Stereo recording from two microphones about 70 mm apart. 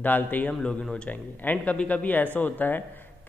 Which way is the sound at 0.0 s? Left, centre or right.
Left.